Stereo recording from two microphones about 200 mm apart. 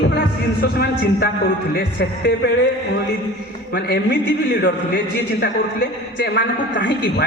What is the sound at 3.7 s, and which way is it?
A man's voice, 50° left (ahead or behind).